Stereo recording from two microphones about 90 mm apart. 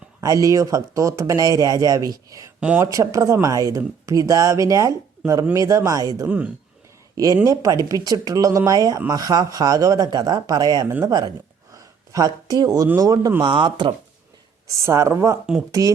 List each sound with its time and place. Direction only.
0.2 s speech: 40° right (ahead or behind)
2.6 s speech: 15° right (ahead or behind)
2.8 s speech: 40° right (ahead or behind)
6.2 s speech: 15° right (ahead or behind)
7.4 s speech: 40° right (ahead or behind)
11.7 s a sound: 40° right (ahead or behind)
13.0 s speech: 40° right (ahead or behind)
13.4 s speech: 60° right (ahead or behind)
14.7 s speech: 35° right (ahead or behind)